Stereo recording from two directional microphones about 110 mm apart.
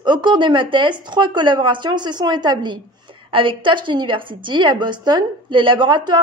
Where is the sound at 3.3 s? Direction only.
50° right (ahead or behind).